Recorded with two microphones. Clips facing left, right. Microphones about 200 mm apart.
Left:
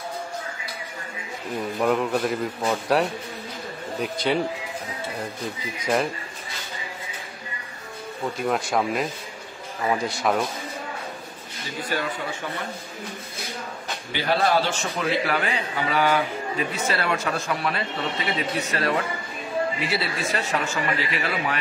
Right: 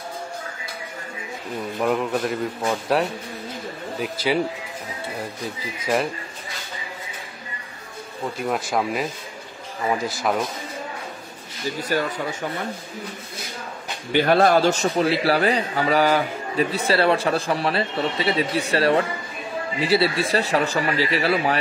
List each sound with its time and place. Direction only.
1.8 s speech: centre (ahead or behind)
8.5 s speech: centre (ahead or behind)
11.9 s speech: 45° right (ahead or behind)
14.1 s a man's voice: 50° right (ahead or behind); by 21.5 s 35° right (ahead or behind)